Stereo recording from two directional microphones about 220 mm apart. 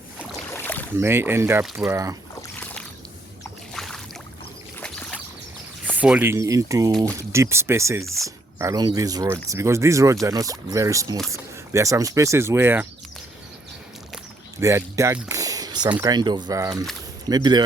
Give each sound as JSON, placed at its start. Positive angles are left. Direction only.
{"t": 0.5, "sound": "boat", "side_deg": 10}
{"t": 0.9, "sound": "speech", "side_deg": -10}
{"t": 3.8, "sound": "boat", "side_deg": 0}
{"t": 4.8, "sound": "a sound", "side_deg": 5}
{"t": 5.8, "sound": "speech", "side_deg": -5}
{"t": 14.6, "sound": "speech", "side_deg": -15}